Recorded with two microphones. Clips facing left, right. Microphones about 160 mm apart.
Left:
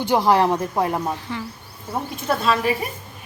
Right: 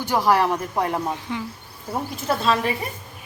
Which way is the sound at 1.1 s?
15° right (ahead or behind).